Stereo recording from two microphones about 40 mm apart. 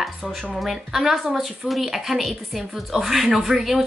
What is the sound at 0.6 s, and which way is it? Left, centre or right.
A woman's voice, centre.